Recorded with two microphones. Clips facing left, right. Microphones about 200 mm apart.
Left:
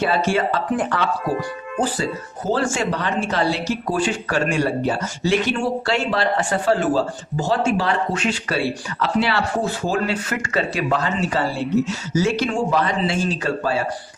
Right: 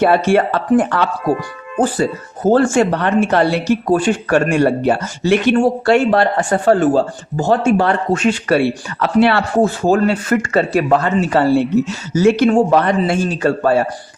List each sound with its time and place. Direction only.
0.0 s speech: 60° right (ahead or behind)
2.5 s speech: 55° right (ahead or behind)